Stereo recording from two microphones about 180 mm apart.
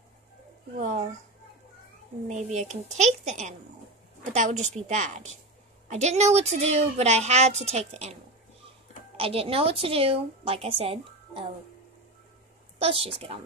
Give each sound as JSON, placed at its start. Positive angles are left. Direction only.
{"t": 0.7, "sound": "speech", "side_deg": -45}
{"t": 2.2, "sound": "speech", "side_deg": -40}
{"t": 12.7, "sound": "speech", "side_deg": -30}